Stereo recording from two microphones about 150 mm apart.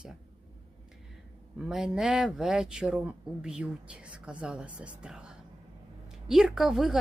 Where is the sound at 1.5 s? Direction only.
5° right (ahead or behind).